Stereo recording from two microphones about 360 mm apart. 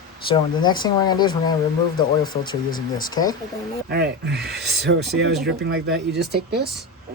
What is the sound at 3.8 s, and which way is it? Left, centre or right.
Speech, right.